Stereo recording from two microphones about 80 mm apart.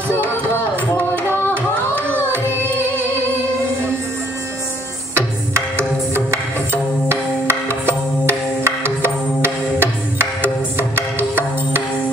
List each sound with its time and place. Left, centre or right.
5.1 s music: right